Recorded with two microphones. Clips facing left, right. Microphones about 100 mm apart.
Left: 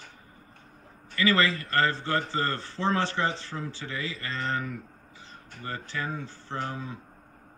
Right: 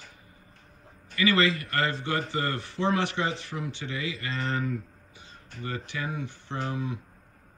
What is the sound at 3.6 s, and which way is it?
Speech, 20° right (ahead or behind).